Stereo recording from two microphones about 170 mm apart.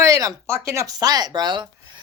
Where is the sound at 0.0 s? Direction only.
20° right (ahead or behind).